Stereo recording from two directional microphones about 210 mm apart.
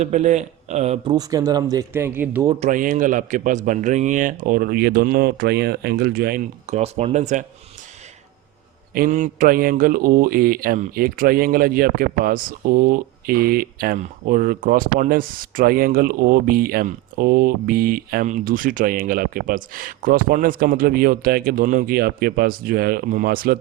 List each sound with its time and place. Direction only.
0.0 s a man's voice: 35° right (ahead or behind)
1.1 s speech: 15° right (ahead or behind)
2.6 s a man's voice: 40° right (ahead or behind)
8.9 s a man's voice: 40° right (ahead or behind)